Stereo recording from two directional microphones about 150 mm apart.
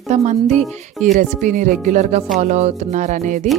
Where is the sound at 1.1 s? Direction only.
60° right (ahead or behind).